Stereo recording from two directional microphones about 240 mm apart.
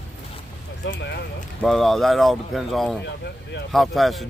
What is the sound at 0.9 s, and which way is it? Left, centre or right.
Speech, left.